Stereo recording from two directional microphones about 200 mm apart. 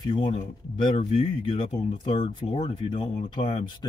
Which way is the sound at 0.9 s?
35° left (ahead or behind).